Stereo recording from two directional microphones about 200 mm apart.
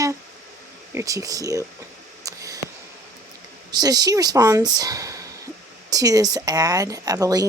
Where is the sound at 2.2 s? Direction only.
15° right (ahead or behind).